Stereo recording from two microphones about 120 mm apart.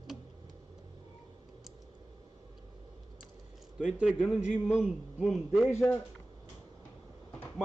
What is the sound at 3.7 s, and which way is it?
A man's voice, 10° right (ahead or behind).